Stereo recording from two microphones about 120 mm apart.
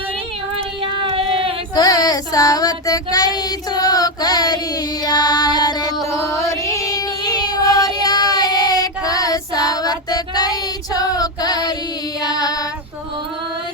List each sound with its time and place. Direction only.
0.5 s child singing: 50° right (ahead or behind)
1.7 s child singing: 30° left (ahead or behind)
6.1 s female singing: 25° left (ahead or behind)
8.0 s child singing: 35° left (ahead or behind)
12.2 s female singing: 35° left (ahead or behind)